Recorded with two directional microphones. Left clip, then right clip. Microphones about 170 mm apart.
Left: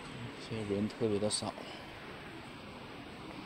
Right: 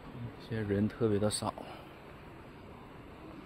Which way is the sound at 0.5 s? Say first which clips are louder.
Right 3 dB; 30° right (ahead or behind).